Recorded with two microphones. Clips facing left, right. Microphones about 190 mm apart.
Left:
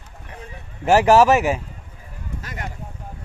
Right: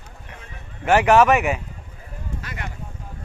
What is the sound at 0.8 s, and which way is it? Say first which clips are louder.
Speech: left 2 dB; 35° left (ahead or behind).